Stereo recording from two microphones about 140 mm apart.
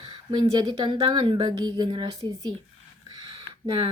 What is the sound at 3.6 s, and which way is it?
Speech, 40° right (ahead or behind).